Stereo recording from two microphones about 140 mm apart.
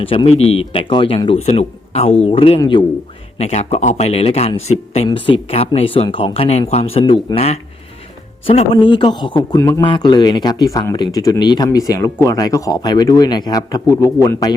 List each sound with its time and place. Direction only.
0.0 s speech: 40° left (ahead or behind)
7.0 s speech: 30° left (ahead or behind)
7.3 s speech: 45° left (ahead or behind)
9.6 s speech: 20° left (ahead or behind)
9.8 s speech: 35° left (ahead or behind)